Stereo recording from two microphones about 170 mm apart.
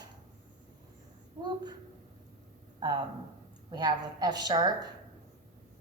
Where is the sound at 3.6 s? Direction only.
25° right (ahead or behind).